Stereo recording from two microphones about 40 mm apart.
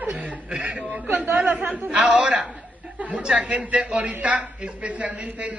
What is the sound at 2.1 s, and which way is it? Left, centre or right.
Speech, right.